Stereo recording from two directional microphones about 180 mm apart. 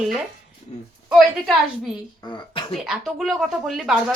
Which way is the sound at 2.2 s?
25° left (ahead or behind).